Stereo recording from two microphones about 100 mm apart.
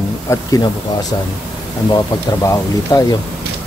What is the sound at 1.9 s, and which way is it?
Speech, 40° left (ahead or behind).